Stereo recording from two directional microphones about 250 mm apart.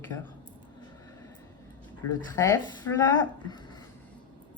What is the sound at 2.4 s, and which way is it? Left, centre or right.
Speech, centre.